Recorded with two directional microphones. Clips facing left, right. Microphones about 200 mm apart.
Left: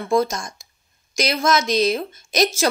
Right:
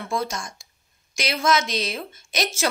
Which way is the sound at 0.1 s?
40° left (ahead or behind).